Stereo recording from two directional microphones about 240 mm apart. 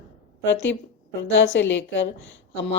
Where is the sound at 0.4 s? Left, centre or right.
Left.